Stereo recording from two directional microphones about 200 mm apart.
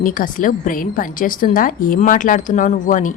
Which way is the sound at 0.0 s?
45° left (ahead or behind).